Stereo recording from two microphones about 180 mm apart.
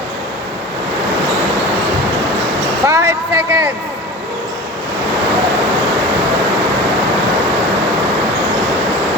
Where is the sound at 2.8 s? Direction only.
15° right (ahead or behind).